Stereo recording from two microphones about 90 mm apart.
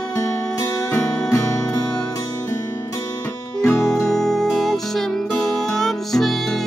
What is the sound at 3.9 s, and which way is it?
Music, 5° left (ahead or behind).